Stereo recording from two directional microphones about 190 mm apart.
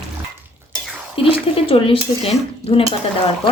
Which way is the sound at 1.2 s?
30° left (ahead or behind).